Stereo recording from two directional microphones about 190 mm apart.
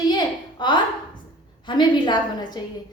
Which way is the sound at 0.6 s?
25° left (ahead or behind).